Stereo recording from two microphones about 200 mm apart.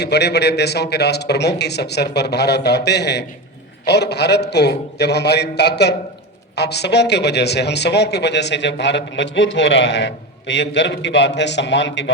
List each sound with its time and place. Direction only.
0.0 s a man's voice: 55° left (ahead or behind)